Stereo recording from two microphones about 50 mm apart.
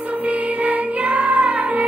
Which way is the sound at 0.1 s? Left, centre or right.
Right.